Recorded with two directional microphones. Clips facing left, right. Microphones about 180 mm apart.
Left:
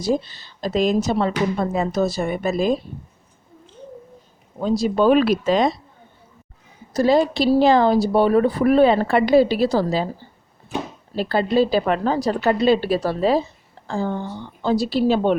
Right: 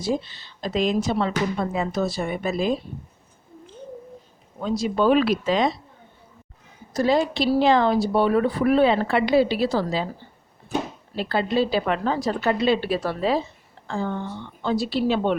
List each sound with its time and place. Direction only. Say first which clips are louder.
0.0 s speech: left 4 dB; 40° left (ahead or behind)
4.6 s speech: left 4 dB; 35° left (ahead or behind)
6.9 s speech: left 4 dB; 35° left (ahead or behind)
11.1 s speech: left 4 dB; 40° left (ahead or behind)